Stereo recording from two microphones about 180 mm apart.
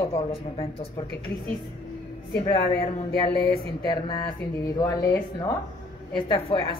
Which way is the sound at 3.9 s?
25° left (ahead or behind).